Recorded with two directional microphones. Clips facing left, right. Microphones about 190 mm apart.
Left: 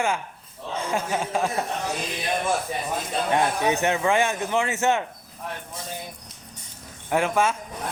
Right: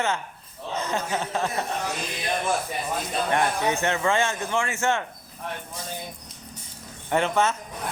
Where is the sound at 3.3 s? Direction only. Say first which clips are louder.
Left 2 dB; 15° left (ahead or behind).